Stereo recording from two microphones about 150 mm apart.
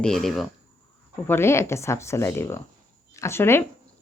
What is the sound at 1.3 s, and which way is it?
Speech, 15° left (ahead or behind).